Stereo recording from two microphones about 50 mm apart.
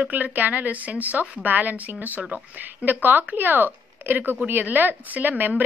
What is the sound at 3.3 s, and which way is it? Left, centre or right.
A woman's voice, right.